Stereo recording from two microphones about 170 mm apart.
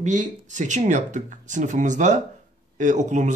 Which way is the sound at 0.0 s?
45° right (ahead or behind).